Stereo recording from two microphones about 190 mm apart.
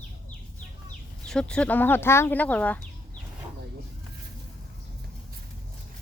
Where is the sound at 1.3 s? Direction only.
5° left (ahead or behind).